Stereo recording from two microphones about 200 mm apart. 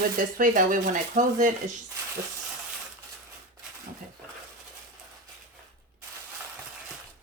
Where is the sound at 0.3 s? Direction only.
40° right (ahead or behind).